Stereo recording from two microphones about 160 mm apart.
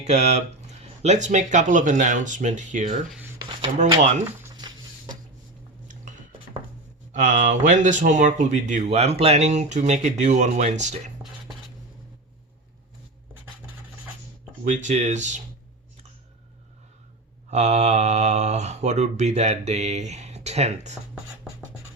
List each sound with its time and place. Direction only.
0.0 s speech: 45° right (ahead or behind)
4.5 s a sound: 25° right (ahead or behind)
7.1 s speech: 50° right (ahead or behind)
14.6 s speech: 50° right (ahead or behind)
17.5 s speech: 45° right (ahead or behind)